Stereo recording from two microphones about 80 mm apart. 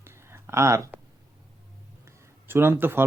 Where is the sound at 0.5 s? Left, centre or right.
Right.